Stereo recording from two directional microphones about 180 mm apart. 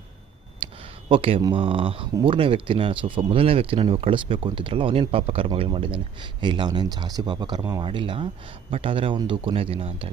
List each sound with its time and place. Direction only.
0.6 s speech: 30° right (ahead or behind)